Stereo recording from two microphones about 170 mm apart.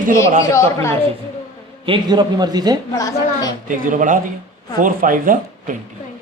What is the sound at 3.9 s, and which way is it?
Speech, 50° right (ahead or behind).